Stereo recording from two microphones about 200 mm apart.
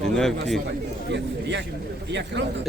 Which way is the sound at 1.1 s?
60° right (ahead or behind).